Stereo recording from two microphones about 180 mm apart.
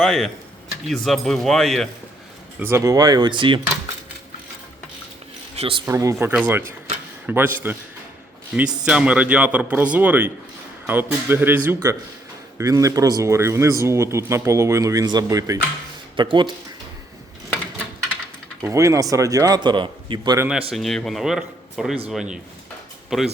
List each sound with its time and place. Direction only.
0.0 s speech: centre (ahead or behind)
2.6 s a man's voice: 15° right (ahead or behind)
5.5 s speech: 30° right (ahead or behind)
5.8 s speech: 15° right (ahead or behind)
8.8 s a man's voice: 5° right (ahead or behind); by 16.5 s 25° right (ahead or behind)
18.7 s a man's voice: 15° right (ahead or behind)
20.5 s speech: 5° right (ahead or behind)